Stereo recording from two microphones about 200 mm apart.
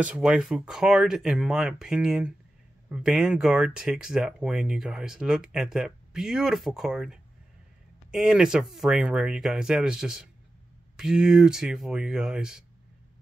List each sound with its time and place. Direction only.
0.0 s speech: 5° right (ahead or behind)